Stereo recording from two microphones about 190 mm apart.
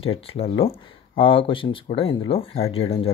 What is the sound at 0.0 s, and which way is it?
Speech, 30° left (ahead or behind).